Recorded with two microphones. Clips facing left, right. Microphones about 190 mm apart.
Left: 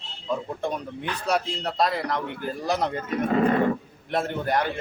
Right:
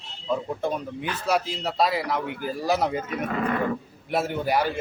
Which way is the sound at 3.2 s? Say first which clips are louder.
Left 7 dB; 30° left (ahead or behind).